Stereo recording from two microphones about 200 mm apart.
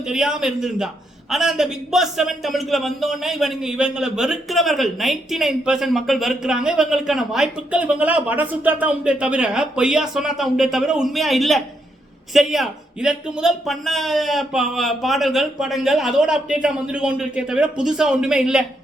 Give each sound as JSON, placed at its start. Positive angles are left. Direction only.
{"t": 0.1, "sound": "a man's voice", "side_deg": -5}